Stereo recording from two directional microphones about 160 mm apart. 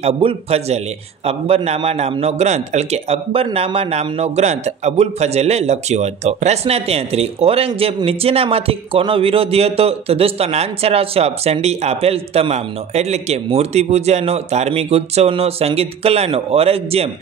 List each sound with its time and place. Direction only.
0.0 s a man's voice: 40° right (ahead or behind)